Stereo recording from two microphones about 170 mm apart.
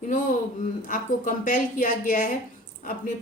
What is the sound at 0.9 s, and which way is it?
Speech, 50° left (ahead or behind).